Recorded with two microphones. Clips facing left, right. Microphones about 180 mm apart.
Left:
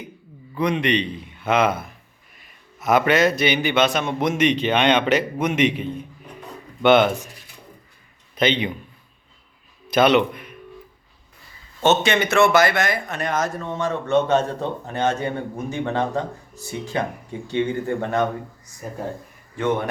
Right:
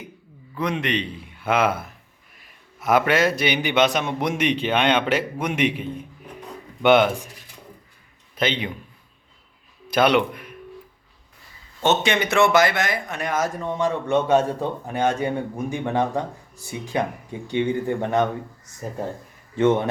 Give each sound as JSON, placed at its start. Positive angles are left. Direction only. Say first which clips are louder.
{"t": 0.5, "sound": "a man's voice", "louder": "left 4 dB", "side_deg": 0}
{"t": 8.4, "sound": "a man's voice", "louder": "left 3 dB", "side_deg": -5}
{"t": 9.9, "sound": "speech", "louder": "left 2 dB", "side_deg": -10}
{"t": 11.8, "sound": "speech", "louder": "left 2 dB", "side_deg": -15}